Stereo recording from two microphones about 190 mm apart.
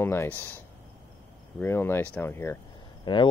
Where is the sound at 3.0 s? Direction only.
25° left (ahead or behind).